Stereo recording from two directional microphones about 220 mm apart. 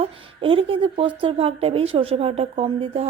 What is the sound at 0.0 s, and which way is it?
Speech, 25° right (ahead or behind).